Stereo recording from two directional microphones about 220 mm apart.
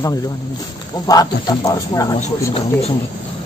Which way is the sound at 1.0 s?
15° left (ahead or behind).